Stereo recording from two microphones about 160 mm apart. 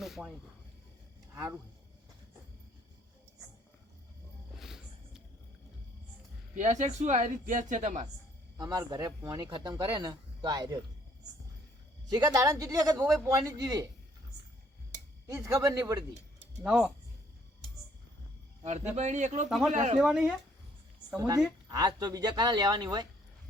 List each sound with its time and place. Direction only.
0.0 s snake: centre (ahead or behind)
1.3 s speech: 20° right (ahead or behind)
4.5 s music: centre (ahead or behind)
6.6 s speech: 45° right (ahead or behind)
8.5 s speech: 25° right (ahead or behind)
12.0 s speech: 25° right (ahead or behind)
15.4 s speech: 20° right (ahead or behind)
16.6 s speech: 5° right (ahead or behind)
18.6 s speech: 45° right (ahead or behind)
19.5 s speech: centre (ahead or behind)
19.7 s speech: 45° right (ahead or behind)
20.0 s speech: 5° right (ahead or behind)
21.2 s speech: 25° right (ahead or behind)